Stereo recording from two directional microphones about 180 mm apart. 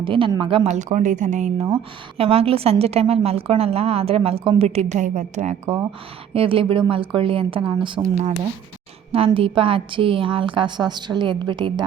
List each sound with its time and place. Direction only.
0.0 s a woman's voice: 30° right (ahead or behind)
6.3 s a woman's voice: 30° right (ahead or behind)